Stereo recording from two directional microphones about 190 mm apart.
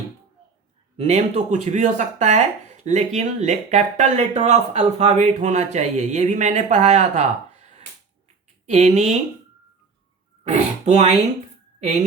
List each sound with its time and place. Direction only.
0.9 s speech: 35° right (ahead or behind)
10.5 s speech: 35° right (ahead or behind)